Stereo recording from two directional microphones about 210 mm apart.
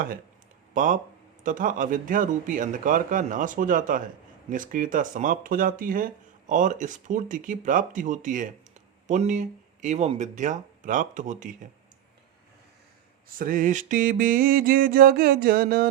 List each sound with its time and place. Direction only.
0.7 s speech: 40° right (ahead or behind)
13.4 s mantra: 40° right (ahead or behind)